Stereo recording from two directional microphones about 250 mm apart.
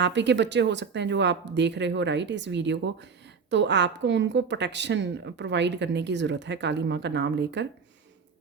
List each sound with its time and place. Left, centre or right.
0.0 s speech: right